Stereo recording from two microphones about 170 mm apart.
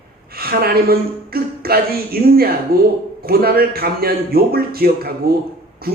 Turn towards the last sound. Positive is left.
turn(degrees=-60)  # may be behind; listen again after turning